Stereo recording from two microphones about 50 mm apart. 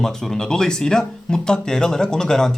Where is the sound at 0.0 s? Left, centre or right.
Centre.